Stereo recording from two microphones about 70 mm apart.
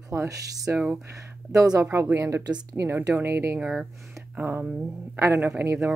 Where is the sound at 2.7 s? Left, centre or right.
Right.